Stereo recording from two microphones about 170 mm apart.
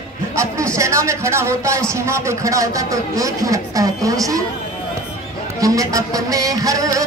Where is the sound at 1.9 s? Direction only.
15° right (ahead or behind).